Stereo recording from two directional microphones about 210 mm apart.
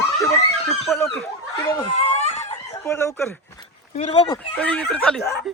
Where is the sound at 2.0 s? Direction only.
30° left (ahead or behind).